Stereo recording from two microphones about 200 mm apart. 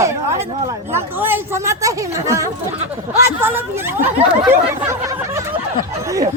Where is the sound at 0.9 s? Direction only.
10° right (ahead or behind).